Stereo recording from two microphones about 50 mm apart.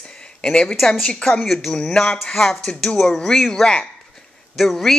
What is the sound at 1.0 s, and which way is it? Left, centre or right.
Speech, centre.